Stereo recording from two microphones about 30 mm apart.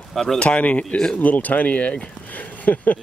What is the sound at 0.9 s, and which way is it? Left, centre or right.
Speech, left.